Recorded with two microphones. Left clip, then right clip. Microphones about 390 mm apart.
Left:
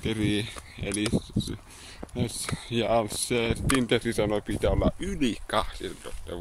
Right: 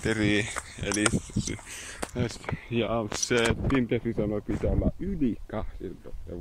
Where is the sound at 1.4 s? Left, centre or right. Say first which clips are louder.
Left 1 dB; left.